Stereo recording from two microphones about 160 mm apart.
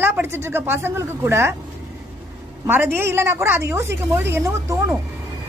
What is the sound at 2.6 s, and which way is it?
A woman's voice, 15° right (ahead or behind).